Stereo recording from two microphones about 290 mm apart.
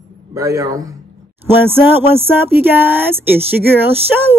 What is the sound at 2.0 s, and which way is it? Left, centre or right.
A man's voice, centre.